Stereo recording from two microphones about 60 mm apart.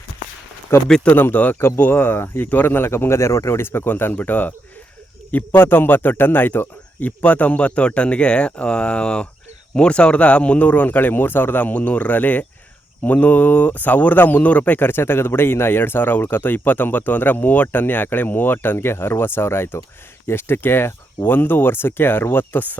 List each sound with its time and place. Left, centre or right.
0.7 s speech: left
1.0 s a man's voice: left
7.2 s a man's voice: left